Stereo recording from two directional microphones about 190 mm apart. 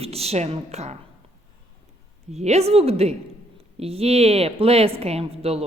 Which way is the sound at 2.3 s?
35° right (ahead or behind).